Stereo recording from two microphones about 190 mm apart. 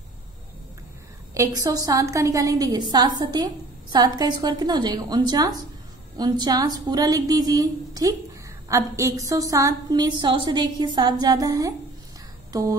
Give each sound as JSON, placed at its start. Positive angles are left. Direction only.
{"t": 1.3, "sound": "a woman's voice", "side_deg": -15}